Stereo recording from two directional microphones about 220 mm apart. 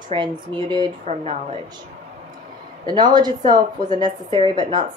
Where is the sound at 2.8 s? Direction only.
20° right (ahead or behind).